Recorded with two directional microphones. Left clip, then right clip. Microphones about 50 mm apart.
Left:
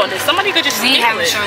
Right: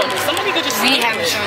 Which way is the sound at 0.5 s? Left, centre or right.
Left.